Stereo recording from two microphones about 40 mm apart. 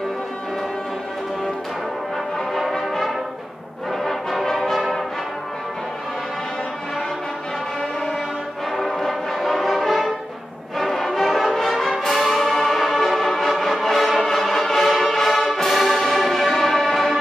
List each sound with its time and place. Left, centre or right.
2.7 s brass instrument: centre
8.7 s brass instrument: centre
10.8 s music: centre